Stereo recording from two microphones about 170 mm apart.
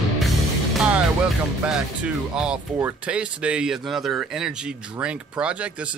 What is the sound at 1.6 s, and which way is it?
Speech, 5° right (ahead or behind).